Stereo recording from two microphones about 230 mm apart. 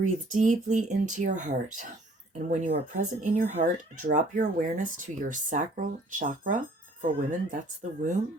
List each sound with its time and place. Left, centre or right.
0.0 s speech: right